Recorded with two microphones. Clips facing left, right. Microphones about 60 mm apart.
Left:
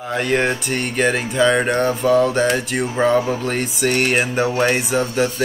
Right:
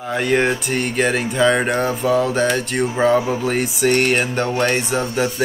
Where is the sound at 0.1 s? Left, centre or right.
Centre.